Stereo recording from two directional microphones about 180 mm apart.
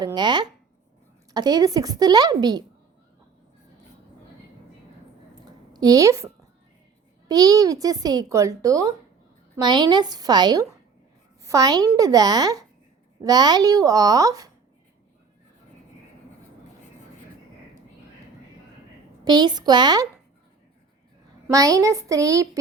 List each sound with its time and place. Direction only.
0.0 s a child's voice: 25° right (ahead or behind)
5.5 s a sound: 20° right (ahead or behind)
7.3 s a child's voice: 20° right (ahead or behind)
19.2 s a child's voice: 25° right (ahead or behind)
21.4 s a child's voice: 20° right (ahead or behind)